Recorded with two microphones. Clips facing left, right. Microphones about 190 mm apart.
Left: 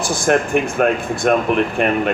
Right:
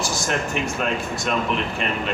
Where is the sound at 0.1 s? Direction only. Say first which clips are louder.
Left 9 dB; 55° left (ahead or behind).